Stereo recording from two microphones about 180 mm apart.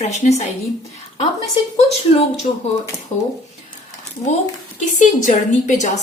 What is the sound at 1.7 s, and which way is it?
Speech, 35° left (ahead or behind).